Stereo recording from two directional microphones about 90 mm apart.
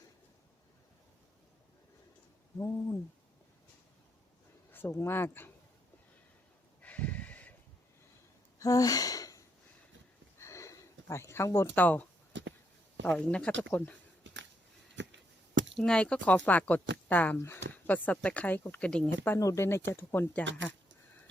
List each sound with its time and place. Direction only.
2.6 s owl: 35° left (ahead or behind)
4.7 s speech: 25° left (ahead or behind)
6.8 s a sound: 15° left (ahead or behind)
8.5 s gasp: 40° left (ahead or behind)
10.4 s a sound: 35° left (ahead or behind)
11.8 s speech: 20° left (ahead or behind)
13.1 s speech: 10° left (ahead or behind)
15.8 s speech: 10° left (ahead or behind)
17.3 s speech: 25° left (ahead or behind)
18.9 s speech: 10° left (ahead or behind)
19.4 s speech: 35° left (ahead or behind)